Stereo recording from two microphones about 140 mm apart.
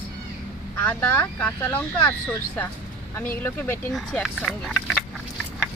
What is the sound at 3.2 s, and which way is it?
Speech, 15° left (ahead or behind).